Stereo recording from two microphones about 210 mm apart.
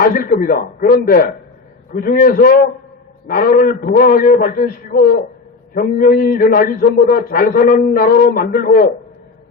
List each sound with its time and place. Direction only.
0.0 s a man's voice: 45° left (ahead or behind)